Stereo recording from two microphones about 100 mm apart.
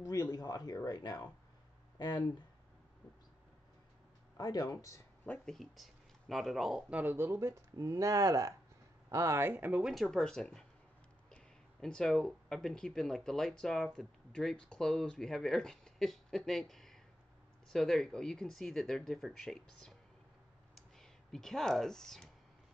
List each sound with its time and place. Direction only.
0.0 s speech: 40° left (ahead or behind)
4.4 s speech: 40° left (ahead or behind)
5.4 s speech: 5° left (ahead or behind)
6.9 s speech: 20° right (ahead or behind)
9.8 s speech: 5° right (ahead or behind)
10.0 s speech: 5° left (ahead or behind)
20.7 s a sound: 5° left (ahead or behind)